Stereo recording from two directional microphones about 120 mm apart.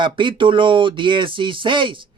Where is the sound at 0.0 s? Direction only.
45° right (ahead or behind).